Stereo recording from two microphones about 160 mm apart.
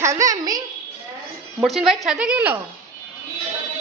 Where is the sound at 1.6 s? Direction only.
Centre (ahead or behind).